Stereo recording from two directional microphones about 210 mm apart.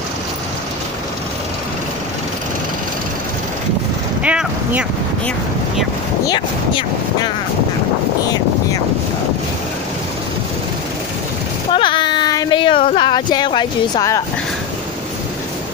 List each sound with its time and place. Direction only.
4.2 s speech: 5° right (ahead or behind)
11.7 s speech: 25° left (ahead or behind)